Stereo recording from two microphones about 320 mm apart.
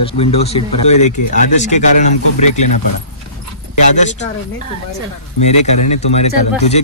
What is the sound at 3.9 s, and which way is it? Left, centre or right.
Speech, left.